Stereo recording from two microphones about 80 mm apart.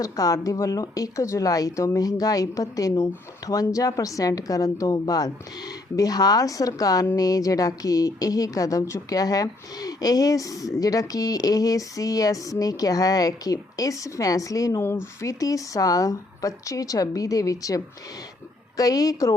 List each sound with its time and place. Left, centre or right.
0.0 s speech: left